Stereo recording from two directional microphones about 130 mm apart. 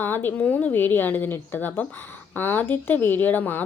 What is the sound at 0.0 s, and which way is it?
A woman's voice, 15° left (ahead or behind).